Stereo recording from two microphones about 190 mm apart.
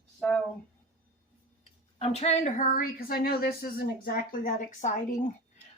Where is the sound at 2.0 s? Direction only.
35° left (ahead or behind).